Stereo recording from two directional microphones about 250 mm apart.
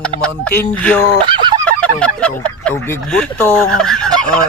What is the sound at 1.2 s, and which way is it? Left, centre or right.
Goose, centre.